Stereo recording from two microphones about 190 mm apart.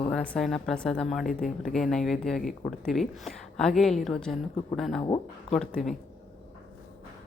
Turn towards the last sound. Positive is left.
turn(degrees=0)  # may be behind; listen again after turning